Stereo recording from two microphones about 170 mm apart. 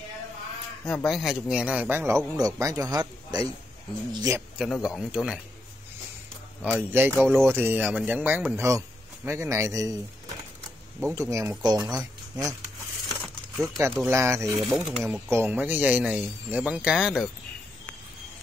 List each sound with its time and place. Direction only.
0.8 s speech: 5° left (ahead or behind); by 4.4 s 20° right (ahead or behind)
4.6 s speech: centre (ahead or behind)
6.6 s speech: 10° right (ahead or behind)
11.0 s speech: 15° right (ahead or behind)
13.2 s a sound: centre (ahead or behind)
13.9 s speech: 15° right (ahead or behind)